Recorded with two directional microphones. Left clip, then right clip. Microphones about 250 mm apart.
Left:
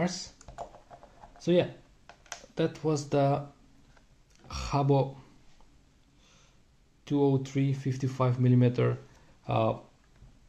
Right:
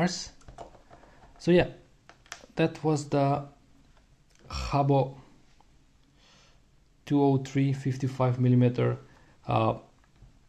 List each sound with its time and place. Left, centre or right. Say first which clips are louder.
0.0 s speech: right 3 dB; right
1.4 s speech: right 3 dB; right
4.5 s speech: right 2 dB; centre
7.1 s speech: right 2 dB; centre
9.4 s speech: right 2 dB; centre